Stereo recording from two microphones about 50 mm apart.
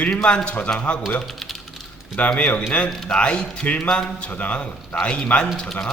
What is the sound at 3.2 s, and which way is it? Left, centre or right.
A man's voice, centre.